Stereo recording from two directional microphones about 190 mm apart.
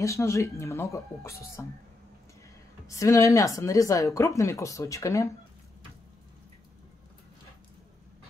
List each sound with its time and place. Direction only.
0.0 s speech: 15° left (ahead or behind)
2.9 s speech: 15° left (ahead or behind)